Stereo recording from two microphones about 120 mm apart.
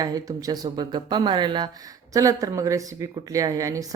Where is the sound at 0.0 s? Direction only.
30° right (ahead or behind).